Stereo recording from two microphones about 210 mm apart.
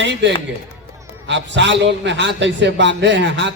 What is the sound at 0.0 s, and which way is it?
A man's voice, 55° right (ahead or behind).